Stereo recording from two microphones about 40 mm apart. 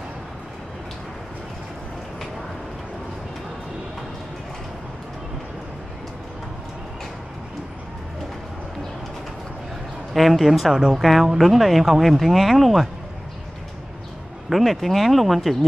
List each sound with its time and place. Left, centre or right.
10.1 s speech: centre
10.7 s speech: centre
11.0 s speech: centre
14.5 s speech: centre